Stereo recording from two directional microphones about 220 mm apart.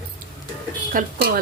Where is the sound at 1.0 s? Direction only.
35° right (ahead or behind).